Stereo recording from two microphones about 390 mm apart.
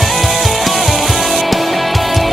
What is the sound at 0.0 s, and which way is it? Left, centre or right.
Music, centre.